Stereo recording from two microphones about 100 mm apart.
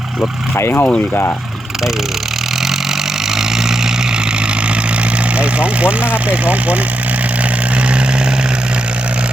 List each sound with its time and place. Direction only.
0.2 s speech: 20° left (ahead or behind)
5.4 s speech: 10° right (ahead or behind)